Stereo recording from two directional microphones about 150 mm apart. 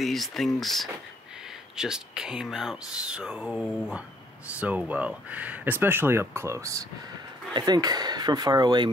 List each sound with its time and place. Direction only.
0.0 s speech: centre (ahead or behind); by 8.9 s 30° right (ahead or behind)